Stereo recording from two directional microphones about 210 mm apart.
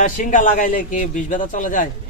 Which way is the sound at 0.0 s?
40° left (ahead or behind).